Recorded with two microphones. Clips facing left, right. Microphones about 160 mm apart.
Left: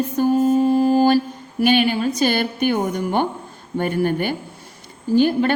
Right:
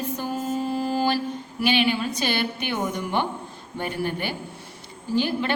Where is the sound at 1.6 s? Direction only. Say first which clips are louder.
Left 5 dB; 45° left (ahead or behind).